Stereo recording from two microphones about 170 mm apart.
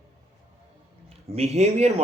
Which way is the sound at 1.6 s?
40° right (ahead or behind).